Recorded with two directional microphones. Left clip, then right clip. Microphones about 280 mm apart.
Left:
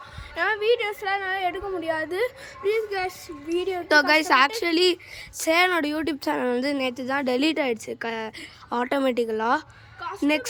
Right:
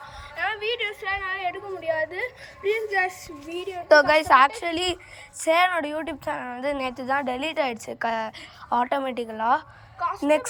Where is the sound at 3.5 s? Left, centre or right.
Left.